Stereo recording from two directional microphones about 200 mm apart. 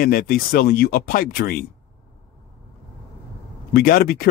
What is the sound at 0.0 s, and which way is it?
Speech, 45° left (ahead or behind).